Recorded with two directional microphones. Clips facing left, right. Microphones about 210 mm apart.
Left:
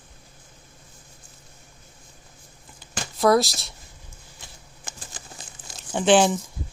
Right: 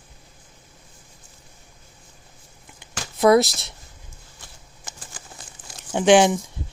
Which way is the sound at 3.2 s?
20° right (ahead or behind).